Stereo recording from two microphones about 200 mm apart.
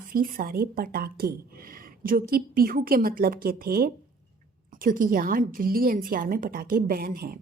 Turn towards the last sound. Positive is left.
turn(degrees=-45)  # may be behind; listen again after turning